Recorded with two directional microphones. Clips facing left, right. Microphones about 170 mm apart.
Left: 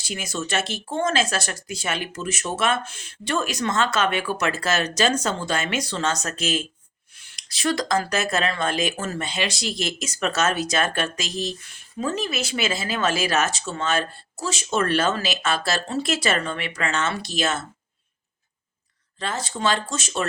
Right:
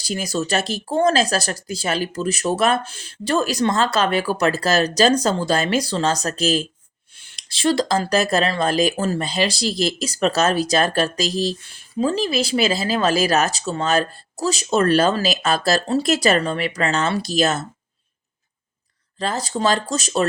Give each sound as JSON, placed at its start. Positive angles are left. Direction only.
{"t": 0.0, "sound": "speech", "side_deg": -35}
{"t": 19.2, "sound": "speech", "side_deg": -35}